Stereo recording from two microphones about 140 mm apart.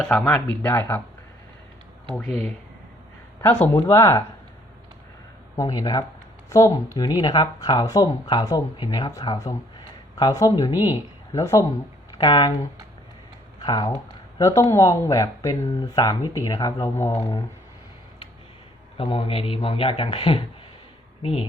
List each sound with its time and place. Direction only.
0.1 s speech: 5° left (ahead or behind)
2.1 s speech: 5° left (ahead or behind)
5.5 s speech: 30° left (ahead or behind)
12.1 s speech: 35° left (ahead or behind)
13.7 s a man's voice: 30° left (ahead or behind)
18.9 s a man's voice: 40° left (ahead or behind)